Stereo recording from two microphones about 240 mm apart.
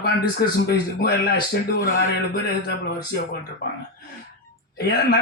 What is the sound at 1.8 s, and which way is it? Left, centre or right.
Speech, left.